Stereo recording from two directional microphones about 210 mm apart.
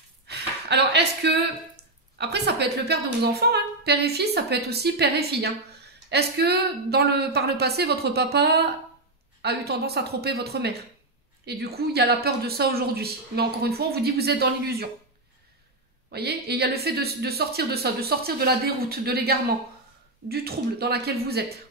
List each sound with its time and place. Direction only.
0.3 s speech: 55° right (ahead or behind)
16.1 s speech: 50° right (ahead or behind)